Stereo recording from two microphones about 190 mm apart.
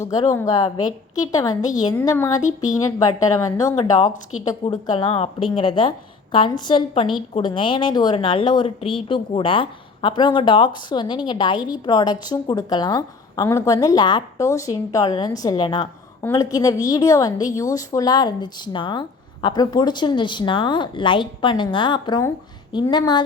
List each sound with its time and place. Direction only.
0.0 s a woman's voice: 20° left (ahead or behind)